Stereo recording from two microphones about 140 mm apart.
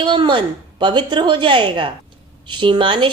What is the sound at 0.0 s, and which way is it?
Speech, 35° right (ahead or behind).